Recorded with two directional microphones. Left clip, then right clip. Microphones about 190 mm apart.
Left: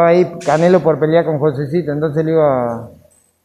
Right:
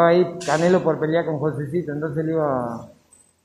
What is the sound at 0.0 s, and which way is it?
A man's voice, 30° left (ahead or behind).